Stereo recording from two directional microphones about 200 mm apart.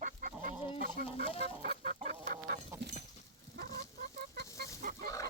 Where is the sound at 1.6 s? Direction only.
50° right (ahead or behind).